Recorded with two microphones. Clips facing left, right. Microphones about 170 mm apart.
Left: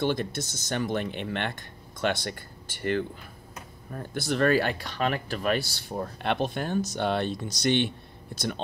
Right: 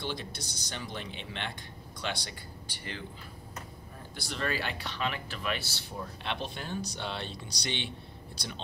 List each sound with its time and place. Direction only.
0.0 s speech: 50° left (ahead or behind)